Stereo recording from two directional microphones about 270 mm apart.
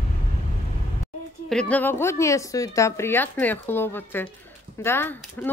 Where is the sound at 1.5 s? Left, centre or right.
Centre.